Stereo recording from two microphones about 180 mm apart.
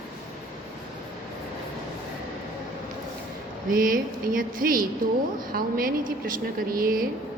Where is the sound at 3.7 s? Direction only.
50° right (ahead or behind).